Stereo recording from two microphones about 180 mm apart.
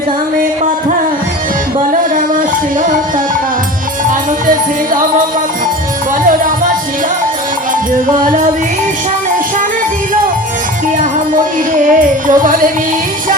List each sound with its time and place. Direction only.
1.9 s music: 50° right (ahead or behind)
8.1 s music: 50° right (ahead or behind)
10.9 s music: 50° right (ahead or behind)